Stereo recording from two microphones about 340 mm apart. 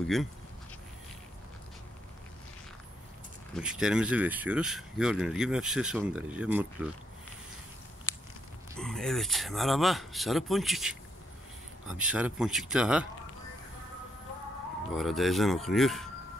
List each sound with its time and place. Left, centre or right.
0.0 s speech: centre
3.5 s speech: centre
8.7 s speech: centre
14.9 s speech: centre